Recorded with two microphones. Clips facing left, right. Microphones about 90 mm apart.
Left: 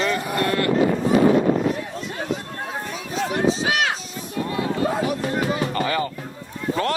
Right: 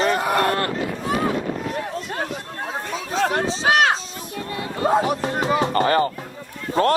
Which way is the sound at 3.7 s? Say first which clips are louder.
Right 5 dB; 50° right (ahead or behind).